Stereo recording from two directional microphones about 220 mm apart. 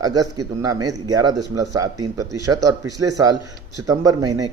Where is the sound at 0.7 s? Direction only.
15° right (ahead or behind).